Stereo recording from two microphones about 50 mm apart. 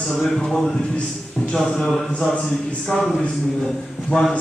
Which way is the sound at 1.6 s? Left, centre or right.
Centre.